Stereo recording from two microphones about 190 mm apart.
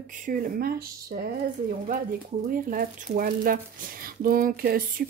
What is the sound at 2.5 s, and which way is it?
Speech, 45° right (ahead or behind).